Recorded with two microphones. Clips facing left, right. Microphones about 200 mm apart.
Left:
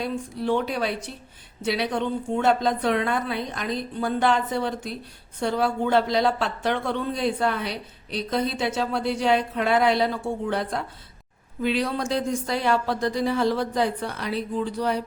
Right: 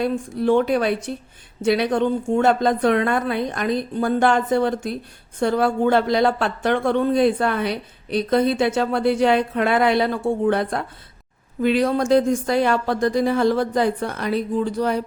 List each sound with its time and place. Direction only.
0.0 s speech: 50° right (ahead or behind)